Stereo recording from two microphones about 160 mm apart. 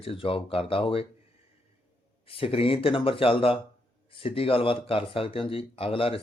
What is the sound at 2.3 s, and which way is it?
Speech, 35° left (ahead or behind).